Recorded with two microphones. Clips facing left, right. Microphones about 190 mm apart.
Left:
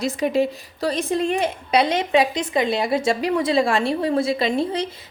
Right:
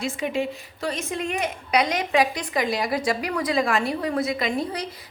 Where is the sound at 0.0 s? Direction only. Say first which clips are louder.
Left 6 dB; 40° left (ahead or behind).